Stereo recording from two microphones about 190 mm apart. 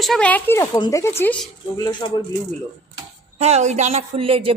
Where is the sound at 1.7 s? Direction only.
25° left (ahead or behind).